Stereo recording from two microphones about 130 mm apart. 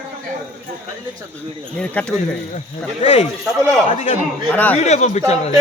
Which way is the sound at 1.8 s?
10° left (ahead or behind).